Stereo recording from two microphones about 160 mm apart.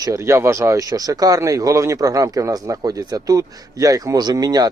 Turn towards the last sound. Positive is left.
turn(degrees=-25)  # may be behind; listen again after turning